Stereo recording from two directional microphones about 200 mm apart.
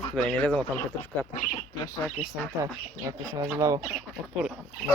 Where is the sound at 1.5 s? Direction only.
25° left (ahead or behind).